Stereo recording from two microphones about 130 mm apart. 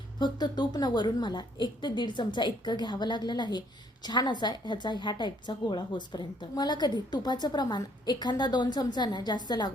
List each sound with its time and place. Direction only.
0.2 s a woman's voice: 35° left (ahead or behind)